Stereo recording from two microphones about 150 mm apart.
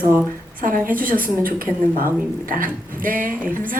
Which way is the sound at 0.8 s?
65° right (ahead or behind).